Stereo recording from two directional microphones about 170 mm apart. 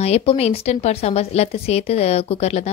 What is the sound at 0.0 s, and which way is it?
Speech, 35° left (ahead or behind).